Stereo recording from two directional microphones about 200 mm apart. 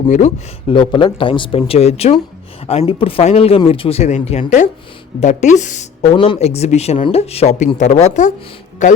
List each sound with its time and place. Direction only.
0.1 s speech: 35° left (ahead or behind)
0.7 s speech: 25° left (ahead or behind)
6.1 s speech: 25° left (ahead or behind)